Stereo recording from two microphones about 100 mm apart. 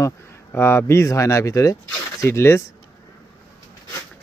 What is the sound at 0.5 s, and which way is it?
Speech, 25° left (ahead or behind).